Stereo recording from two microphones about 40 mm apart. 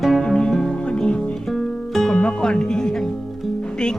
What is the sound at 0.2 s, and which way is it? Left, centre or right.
Music, centre.